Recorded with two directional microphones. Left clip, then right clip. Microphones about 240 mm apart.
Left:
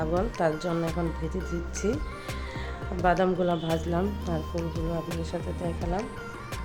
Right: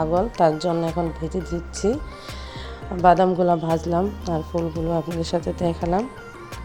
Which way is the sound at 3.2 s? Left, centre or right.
Centre.